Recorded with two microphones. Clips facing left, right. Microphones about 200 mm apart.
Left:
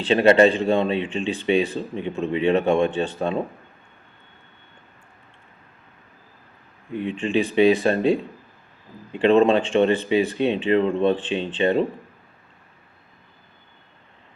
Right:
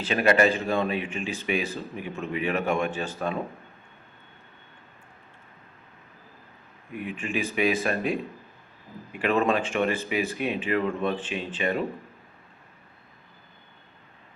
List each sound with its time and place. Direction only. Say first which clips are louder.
0.0 s speech: left 7 dB; 25° left (ahead or behind)
6.9 s speech: left 8 dB; 25° left (ahead or behind)